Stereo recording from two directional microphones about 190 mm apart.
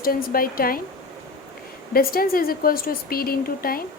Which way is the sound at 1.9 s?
50° left (ahead or behind).